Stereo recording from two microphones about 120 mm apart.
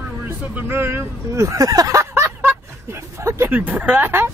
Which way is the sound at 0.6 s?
20° right (ahead or behind).